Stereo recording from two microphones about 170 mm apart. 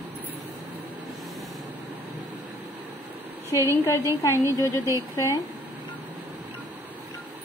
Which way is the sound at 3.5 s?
20° left (ahead or behind).